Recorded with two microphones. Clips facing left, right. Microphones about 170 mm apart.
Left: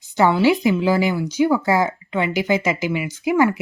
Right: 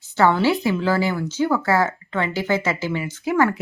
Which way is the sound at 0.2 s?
15° left (ahead or behind).